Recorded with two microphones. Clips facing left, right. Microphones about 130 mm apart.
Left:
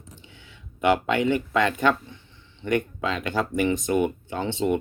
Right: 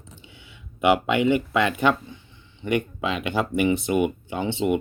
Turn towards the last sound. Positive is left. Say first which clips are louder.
# right 1 dB
turn(degrees=-10)  # may be behind; listen again after turning